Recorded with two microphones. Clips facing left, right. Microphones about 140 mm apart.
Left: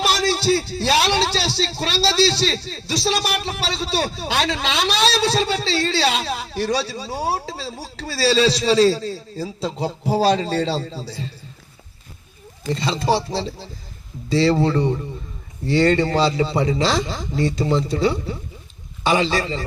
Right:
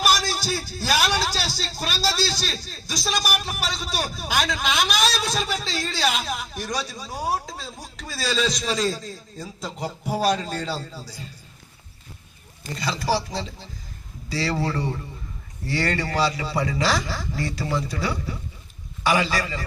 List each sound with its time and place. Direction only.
0.3 s a man's voice: 30° left (ahead or behind)
12.7 s a man's voice: 25° left (ahead or behind)